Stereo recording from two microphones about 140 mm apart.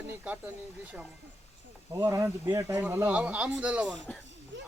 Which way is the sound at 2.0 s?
20° right (ahead or behind).